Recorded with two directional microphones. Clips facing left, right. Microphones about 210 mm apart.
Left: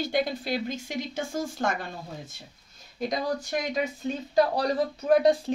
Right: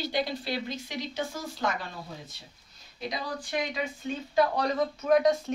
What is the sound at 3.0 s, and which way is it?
Speech, 45° left (ahead or behind).